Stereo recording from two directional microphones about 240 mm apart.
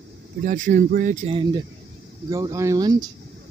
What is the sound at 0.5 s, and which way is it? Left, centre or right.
Speech, right.